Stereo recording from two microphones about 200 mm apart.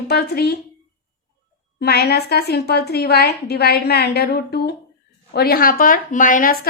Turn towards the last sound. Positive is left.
turn(degrees=45)  # may be behind; listen again after turning